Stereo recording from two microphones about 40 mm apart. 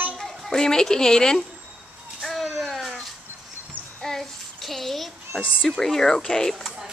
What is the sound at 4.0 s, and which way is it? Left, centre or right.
Child singing, centre.